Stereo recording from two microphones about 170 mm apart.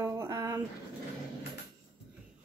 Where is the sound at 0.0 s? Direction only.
20° right (ahead or behind).